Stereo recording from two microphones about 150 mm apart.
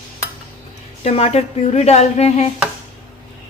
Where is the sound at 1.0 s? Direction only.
45° left (ahead or behind).